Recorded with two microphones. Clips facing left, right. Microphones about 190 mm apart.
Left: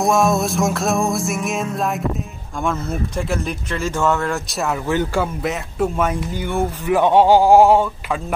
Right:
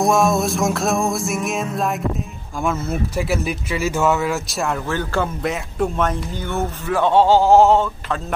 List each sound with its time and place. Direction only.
0.0 s speech: centre (ahead or behind)
4.8 s speech: 15° left (ahead or behind)
5.2 s speech: 5° left (ahead or behind)